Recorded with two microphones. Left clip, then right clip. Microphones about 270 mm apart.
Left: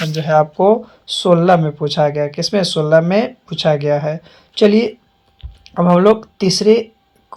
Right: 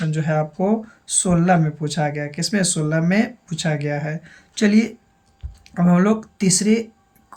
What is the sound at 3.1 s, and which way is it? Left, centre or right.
Speech, centre.